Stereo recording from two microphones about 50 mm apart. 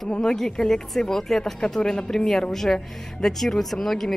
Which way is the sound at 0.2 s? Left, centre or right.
Centre.